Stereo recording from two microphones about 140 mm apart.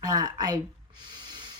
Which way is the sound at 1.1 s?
30° right (ahead or behind).